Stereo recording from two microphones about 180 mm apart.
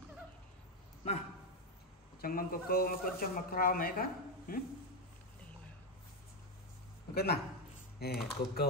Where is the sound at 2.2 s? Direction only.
55° left (ahead or behind).